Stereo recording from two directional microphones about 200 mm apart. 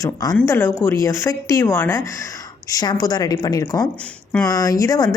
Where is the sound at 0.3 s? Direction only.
10° left (ahead or behind).